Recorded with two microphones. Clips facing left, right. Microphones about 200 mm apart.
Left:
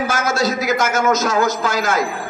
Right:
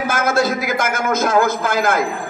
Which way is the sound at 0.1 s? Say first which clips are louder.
Right 2 dB; 55° right (ahead or behind).